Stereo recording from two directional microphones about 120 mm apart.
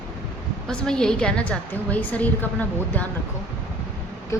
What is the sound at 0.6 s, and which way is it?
A woman's voice, 5° left (ahead or behind).